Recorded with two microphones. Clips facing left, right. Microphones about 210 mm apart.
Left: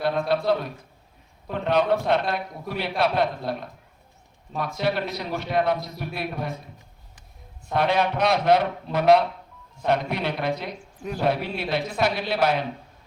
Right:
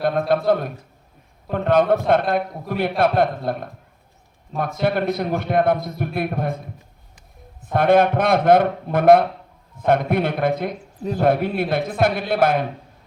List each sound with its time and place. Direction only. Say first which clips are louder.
0.0 s a man's voice: right 4 dB; 50° right (ahead or behind)
7.7 s a man's voice: right 7 dB; 50° right (ahead or behind)